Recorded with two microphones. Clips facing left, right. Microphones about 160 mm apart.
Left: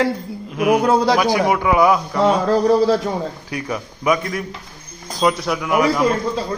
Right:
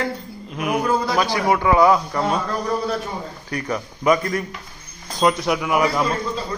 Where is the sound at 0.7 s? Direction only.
80° left.